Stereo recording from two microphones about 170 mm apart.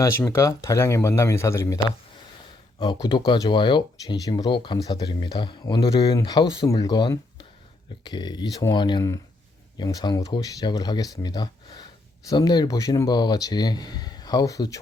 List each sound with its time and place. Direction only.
0.0 s speech: 15° left (ahead or behind)